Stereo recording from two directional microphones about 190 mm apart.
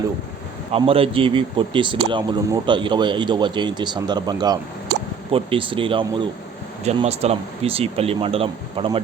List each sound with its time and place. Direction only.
0.7 s speech: 30° right (ahead or behind)